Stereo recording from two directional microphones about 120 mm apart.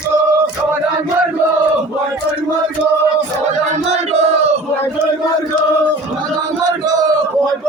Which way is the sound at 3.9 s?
65° right (ahead or behind).